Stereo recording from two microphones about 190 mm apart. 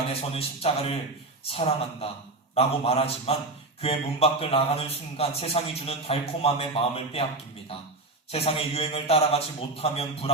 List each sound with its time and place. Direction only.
0.1 s a man's voice: 30° left (ahead or behind)
8.3 s a man's voice: 30° left (ahead or behind)